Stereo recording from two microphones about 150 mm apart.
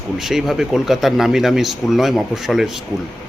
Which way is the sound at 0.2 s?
Centre (ahead or behind).